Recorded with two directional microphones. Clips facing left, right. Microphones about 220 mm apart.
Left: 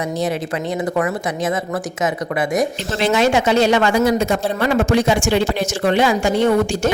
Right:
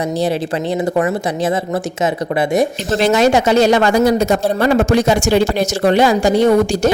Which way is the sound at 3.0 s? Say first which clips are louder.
Right 3 dB; 40° right (ahead or behind).